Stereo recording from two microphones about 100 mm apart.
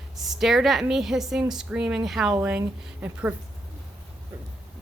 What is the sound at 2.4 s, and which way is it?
Speech, 15° right (ahead or behind).